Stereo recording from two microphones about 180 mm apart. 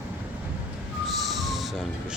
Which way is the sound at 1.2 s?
Centre (ahead or behind).